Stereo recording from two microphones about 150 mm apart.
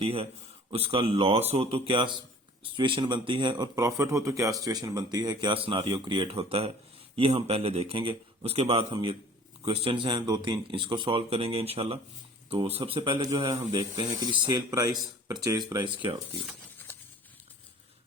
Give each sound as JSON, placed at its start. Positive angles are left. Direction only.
{"t": 0.0, "sound": "a man's voice", "side_deg": -40}